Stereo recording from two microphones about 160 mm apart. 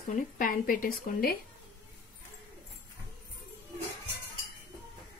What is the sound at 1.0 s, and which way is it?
Speech, 70° left (ahead or behind).